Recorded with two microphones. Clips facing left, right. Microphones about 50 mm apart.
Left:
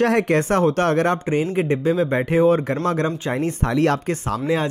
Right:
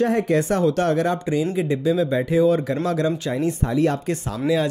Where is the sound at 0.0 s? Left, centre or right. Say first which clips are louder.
Left 2 dB; left.